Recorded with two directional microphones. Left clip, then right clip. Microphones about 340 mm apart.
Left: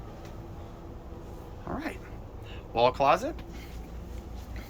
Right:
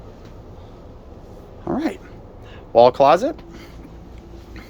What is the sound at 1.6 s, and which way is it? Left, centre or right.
Speech, right.